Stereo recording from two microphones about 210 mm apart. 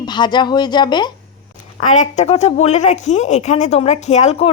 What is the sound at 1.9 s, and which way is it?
A woman's voice, 35° left (ahead or behind).